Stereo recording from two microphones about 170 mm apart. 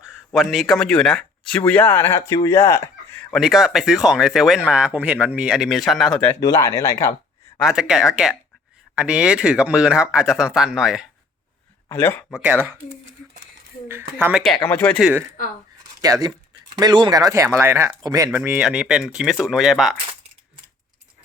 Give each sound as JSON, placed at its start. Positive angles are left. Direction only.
{"t": 0.3, "sound": "speech", "side_deg": 0}
{"t": 3.1, "sound": "speech", "side_deg": 5}
{"t": 6.4, "sound": "speech", "side_deg": 20}
{"t": 7.6, "sound": "speech", "side_deg": -5}
{"t": 11.9, "sound": "speech", "side_deg": 15}
{"t": 12.3, "sound": "speech", "side_deg": -10}
{"t": 14.2, "sound": "speech", "side_deg": -10}
{"t": 14.4, "sound": "speech", "side_deg": 10}
{"t": 16.0, "sound": "speech", "side_deg": -20}